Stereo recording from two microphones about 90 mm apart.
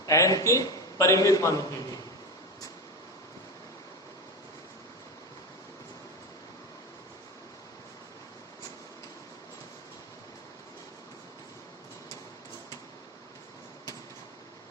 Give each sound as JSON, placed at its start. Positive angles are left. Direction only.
{"t": 0.0, "sound": "a man's voice", "side_deg": 40}